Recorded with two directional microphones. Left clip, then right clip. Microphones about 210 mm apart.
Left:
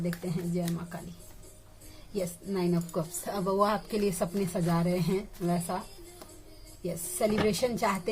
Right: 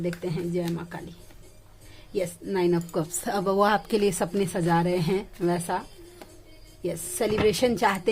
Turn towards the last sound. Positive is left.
turn(degrees=-45)  # may be behind; listen again after turning